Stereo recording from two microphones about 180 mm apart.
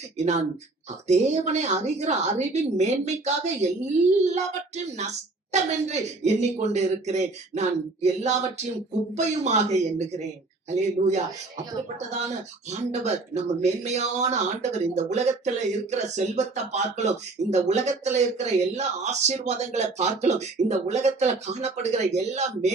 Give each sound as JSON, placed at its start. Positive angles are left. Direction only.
{"t": 1.0, "sound": "speech", "side_deg": -40}